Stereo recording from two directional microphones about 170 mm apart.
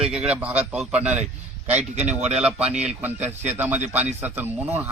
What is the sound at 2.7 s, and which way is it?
Speech, 40° right (ahead or behind).